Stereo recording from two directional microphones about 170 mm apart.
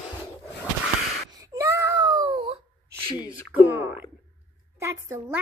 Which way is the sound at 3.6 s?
10° right (ahead or behind).